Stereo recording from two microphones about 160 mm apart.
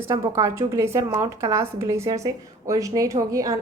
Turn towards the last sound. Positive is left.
turn(degrees=-20)  # may be behind; listen again after turning